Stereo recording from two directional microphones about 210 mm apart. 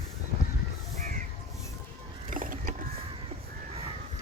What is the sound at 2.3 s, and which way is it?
Mechanisms, 40° right (ahead or behind).